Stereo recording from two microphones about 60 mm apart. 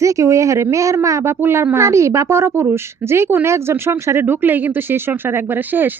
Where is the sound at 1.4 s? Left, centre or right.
Right.